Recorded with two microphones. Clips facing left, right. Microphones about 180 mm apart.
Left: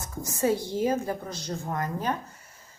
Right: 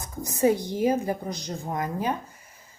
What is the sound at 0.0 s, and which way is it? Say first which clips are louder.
A woman's voice: right 4 dB; 15° right (ahead or behind).